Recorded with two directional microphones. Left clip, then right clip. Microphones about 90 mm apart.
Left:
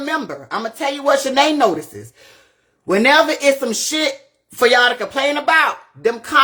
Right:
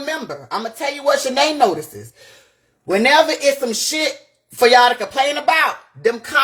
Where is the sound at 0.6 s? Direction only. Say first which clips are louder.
Left 3 dB; 50° left (ahead or behind).